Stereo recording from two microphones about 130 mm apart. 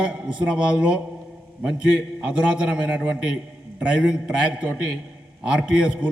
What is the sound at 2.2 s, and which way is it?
A man's voice, 5° right (ahead or behind).